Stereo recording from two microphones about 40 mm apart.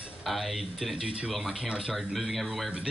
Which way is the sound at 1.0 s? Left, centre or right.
Right.